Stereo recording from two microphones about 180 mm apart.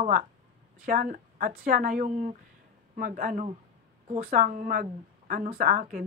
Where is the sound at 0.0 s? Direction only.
40° right (ahead or behind).